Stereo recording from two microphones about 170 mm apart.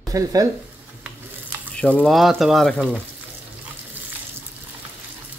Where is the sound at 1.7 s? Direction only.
5° left (ahead or behind).